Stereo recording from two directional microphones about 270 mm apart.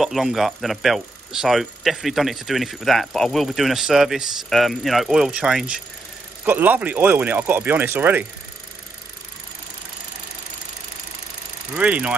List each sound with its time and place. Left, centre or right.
0.0 s speech: centre
11.7 s speech: centre